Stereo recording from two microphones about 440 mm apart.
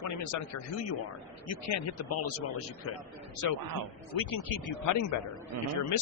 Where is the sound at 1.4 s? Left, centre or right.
Left.